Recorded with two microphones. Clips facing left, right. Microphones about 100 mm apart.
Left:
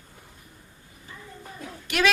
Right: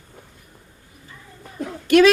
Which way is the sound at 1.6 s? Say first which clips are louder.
Right 11 dB; 55° right (ahead or behind).